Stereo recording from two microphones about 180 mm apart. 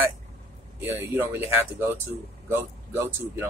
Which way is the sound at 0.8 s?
15° right (ahead or behind).